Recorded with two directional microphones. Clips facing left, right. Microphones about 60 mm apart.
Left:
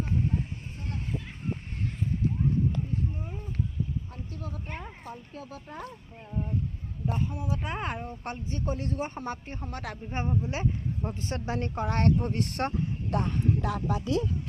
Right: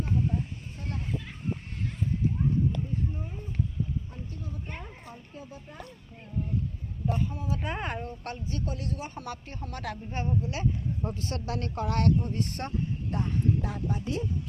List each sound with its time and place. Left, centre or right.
5.3 s speech: left
7.1 s speech: centre
7.5 s speech: centre
8.0 s speech: centre; by 9.4 s left
9.5 s speech: centre
10.1 s speech: left
12.2 s speech: left